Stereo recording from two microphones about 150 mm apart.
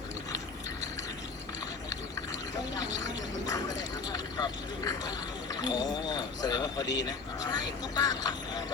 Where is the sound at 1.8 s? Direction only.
20° left (ahead or behind).